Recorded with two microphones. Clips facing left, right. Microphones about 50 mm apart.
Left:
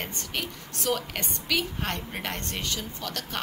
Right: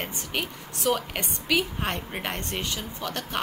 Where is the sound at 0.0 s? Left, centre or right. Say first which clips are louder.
Right 2 dB; centre.